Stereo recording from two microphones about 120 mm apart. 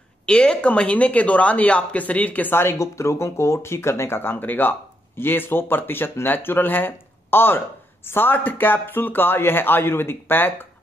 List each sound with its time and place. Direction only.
0.3 s speech: 10° left (ahead or behind)